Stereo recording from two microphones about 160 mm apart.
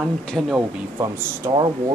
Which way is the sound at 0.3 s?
10° right (ahead or behind).